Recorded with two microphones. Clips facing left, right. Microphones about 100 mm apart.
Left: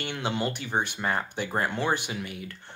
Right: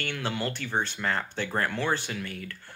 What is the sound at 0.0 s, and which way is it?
Speech, 20° left (ahead or behind).